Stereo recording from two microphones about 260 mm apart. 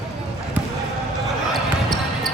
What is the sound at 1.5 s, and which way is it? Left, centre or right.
Basketball bounce, centre.